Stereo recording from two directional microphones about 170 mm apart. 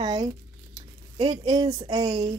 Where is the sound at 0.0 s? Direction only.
25° right (ahead or behind).